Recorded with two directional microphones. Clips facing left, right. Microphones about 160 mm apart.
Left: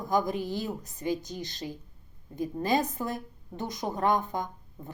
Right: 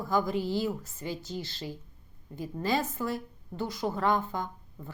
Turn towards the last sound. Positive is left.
turn(degrees=15)  # may be behind; listen again after turning